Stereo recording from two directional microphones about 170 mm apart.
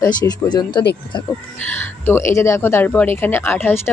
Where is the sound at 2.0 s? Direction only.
15° left (ahead or behind).